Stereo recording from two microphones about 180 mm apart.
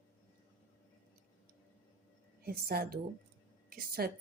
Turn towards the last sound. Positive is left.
turn(degrees=-55)  # may be behind; listen again after turning